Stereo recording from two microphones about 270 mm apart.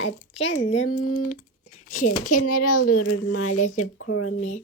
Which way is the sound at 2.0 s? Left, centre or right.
Left.